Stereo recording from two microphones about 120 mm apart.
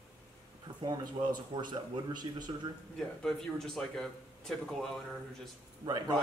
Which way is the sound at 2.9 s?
5° left (ahead or behind).